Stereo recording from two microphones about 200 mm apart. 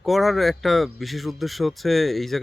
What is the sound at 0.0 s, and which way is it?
Speech, centre (ahead or behind).